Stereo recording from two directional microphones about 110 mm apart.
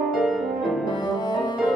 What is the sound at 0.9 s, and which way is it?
Music, 40° left (ahead or behind).